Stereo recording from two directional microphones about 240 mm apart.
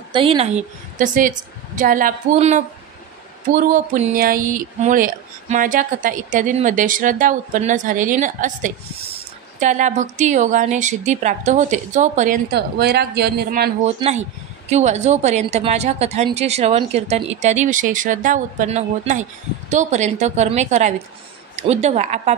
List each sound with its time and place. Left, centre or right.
0.1 s speech: right
12.4 s speech: right
13.8 s speech: right